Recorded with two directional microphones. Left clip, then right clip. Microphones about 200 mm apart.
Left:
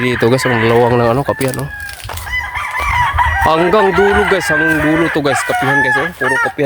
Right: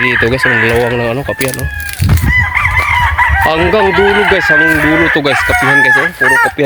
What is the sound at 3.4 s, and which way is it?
Speech, 15° left (ahead or behind).